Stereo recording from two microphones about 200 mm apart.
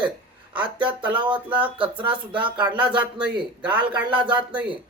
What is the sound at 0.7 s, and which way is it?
Speech, 25° right (ahead or behind).